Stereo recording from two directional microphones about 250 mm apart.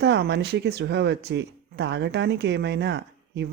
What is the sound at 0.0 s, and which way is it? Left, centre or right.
Speech, right.